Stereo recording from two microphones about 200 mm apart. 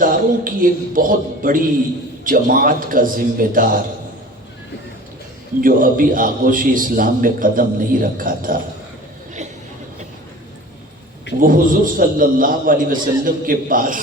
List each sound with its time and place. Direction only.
0.0 s a man's voice: 45° right (ahead or behind)
5.5 s a man's voice: 45° right (ahead or behind)
11.3 s a man's voice: 45° right (ahead or behind)